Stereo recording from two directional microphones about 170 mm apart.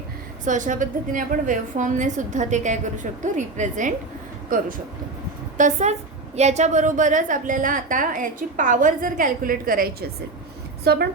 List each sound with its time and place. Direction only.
0.4 s a woman's voice: 50° right (ahead or behind)
5.5 s a woman's voice: 45° right (ahead or behind); by 11.1 s 70° right (ahead or behind)